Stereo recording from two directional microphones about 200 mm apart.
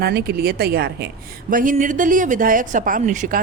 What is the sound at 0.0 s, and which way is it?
A woman's voice, 50° right (ahead or behind).